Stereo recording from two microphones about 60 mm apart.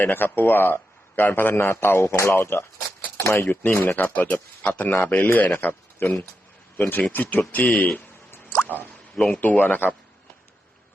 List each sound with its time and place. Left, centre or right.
0.0 s a man's voice: left
3.5 s speech: left
9.1 s speech: centre
9.4 s speech: left